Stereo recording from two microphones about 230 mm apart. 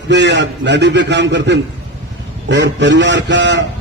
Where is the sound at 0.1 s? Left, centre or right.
Right.